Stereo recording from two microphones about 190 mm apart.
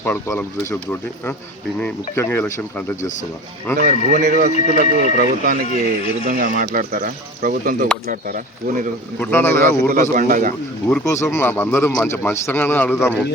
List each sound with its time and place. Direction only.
0.0 s speech: 10° left (ahead or behind)
3.8 s speech: 45° right (ahead or behind)
9.1 s speech: 10° left (ahead or behind)
9.9 s speech: 50° right (ahead or behind)
11.0 s speech: 15° left (ahead or behind)